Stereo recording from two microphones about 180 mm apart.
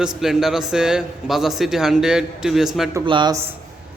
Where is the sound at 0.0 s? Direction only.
5° right (ahead or behind).